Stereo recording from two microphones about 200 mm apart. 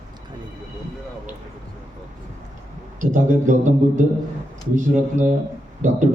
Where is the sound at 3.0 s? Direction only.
40° right (ahead or behind).